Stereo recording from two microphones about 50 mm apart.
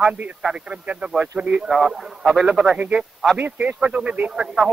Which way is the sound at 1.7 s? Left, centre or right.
Centre.